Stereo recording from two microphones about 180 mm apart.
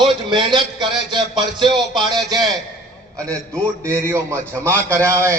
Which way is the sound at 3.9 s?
15° right (ahead or behind).